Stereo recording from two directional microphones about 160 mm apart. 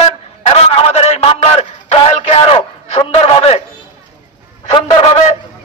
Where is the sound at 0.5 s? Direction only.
35° left (ahead or behind).